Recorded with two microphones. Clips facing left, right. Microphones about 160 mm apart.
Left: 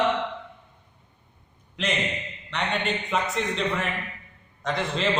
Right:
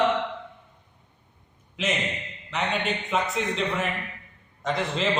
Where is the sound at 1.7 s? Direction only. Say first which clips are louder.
Even; 5° right (ahead or behind).